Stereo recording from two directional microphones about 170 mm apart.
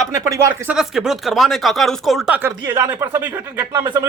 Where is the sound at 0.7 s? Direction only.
5° right (ahead or behind).